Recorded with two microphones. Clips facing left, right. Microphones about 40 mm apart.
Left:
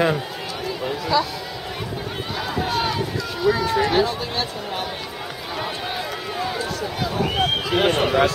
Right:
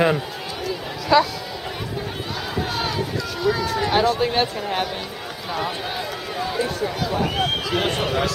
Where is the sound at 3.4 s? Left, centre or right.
Centre.